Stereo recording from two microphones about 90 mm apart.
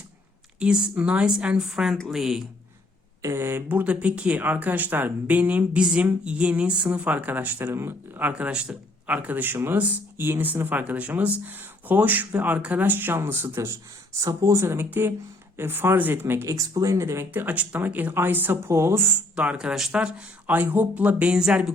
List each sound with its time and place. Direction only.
0.6 s speech: 10° right (ahead or behind)
3.2 s speech: 30° right (ahead or behind)
8.3 s speech: 15° right (ahead or behind); by 16.6 s 30° right (ahead or behind)
16.6 s speech: 40° right (ahead or behind)
17.3 s speech: 20° right (ahead or behind)
19.4 s speech: 10° right (ahead or behind)